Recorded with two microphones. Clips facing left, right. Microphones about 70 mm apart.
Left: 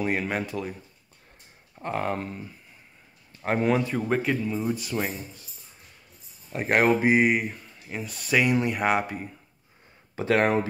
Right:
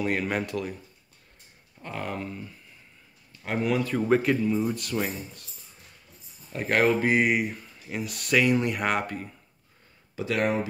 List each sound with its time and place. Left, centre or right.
0.2 s speech: centre
1.8 s speech: left
3.4 s speech: left
3.9 s speech: centre
6.5 s speech: left
7.1 s speech: centre
10.1 s speech: left